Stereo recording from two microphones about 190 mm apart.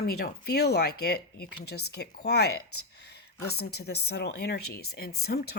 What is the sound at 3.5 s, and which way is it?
Speech, 60° left (ahead or behind).